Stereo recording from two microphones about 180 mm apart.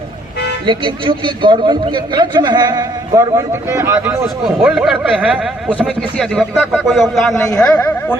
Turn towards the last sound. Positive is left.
turn(degrees=5)  # may be behind; listen again after turning